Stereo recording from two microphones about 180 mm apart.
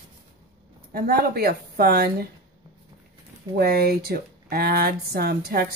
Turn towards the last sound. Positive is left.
turn(degrees=-60)  # may be behind; listen again after turning